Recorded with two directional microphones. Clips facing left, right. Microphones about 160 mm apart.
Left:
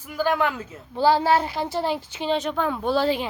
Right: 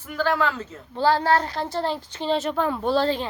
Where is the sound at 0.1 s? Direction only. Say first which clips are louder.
Even; 15° left (ahead or behind).